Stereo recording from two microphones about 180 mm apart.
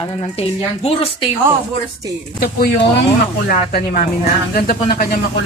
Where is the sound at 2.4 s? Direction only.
55° left (ahead or behind).